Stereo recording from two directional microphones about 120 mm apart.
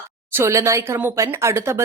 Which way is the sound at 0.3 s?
25° right (ahead or behind).